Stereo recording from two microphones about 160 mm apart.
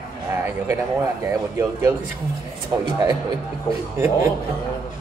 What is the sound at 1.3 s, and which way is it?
A man's voice, 15° right (ahead or behind).